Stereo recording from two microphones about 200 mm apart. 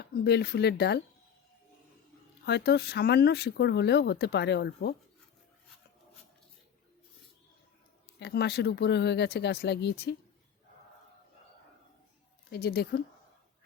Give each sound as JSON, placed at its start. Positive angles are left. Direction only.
{"t": 0.0, "sound": "speech", "side_deg": 55}
{"t": 2.5, "sound": "speech", "side_deg": 55}
{"t": 8.2, "sound": "speech", "side_deg": 55}
{"t": 12.5, "sound": "speech", "side_deg": 50}